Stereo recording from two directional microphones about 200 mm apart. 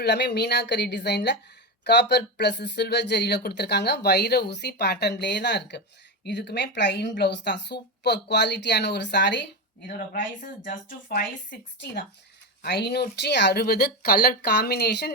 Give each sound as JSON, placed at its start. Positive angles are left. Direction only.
{"t": 0.0, "sound": "speech", "side_deg": 55}
{"t": 10.4, "sound": "speech", "side_deg": 40}
{"t": 12.6, "sound": "speech", "side_deg": 55}